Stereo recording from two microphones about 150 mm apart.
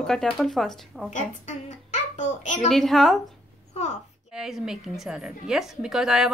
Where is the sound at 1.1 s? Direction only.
55° left (ahead or behind).